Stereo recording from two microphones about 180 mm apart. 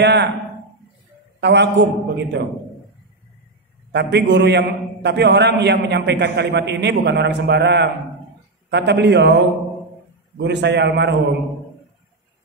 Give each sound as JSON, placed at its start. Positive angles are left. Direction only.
{"t": 0.0, "sound": "a man's voice", "side_deg": -70}
{"t": 1.4, "sound": "a man's voice", "side_deg": -75}
{"t": 3.9, "sound": "a man's voice", "side_deg": -70}